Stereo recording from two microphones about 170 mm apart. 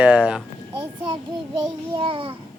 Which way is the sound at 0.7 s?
30° right (ahead or behind).